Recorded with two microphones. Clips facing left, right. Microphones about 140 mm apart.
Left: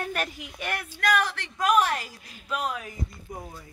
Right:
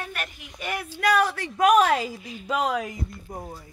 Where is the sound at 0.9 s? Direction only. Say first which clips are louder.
Right 4 dB; 15° right (ahead or behind).